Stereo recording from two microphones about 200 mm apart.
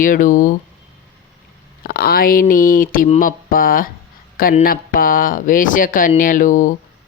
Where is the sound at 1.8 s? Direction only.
50° left (ahead or behind).